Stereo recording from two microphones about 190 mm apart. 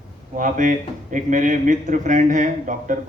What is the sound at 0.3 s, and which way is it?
A man's voice, 45° right (ahead or behind).